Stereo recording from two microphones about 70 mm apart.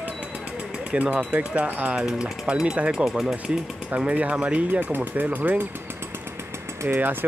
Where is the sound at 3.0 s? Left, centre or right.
Centre.